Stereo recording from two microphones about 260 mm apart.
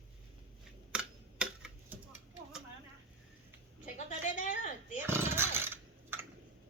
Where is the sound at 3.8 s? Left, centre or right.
Left.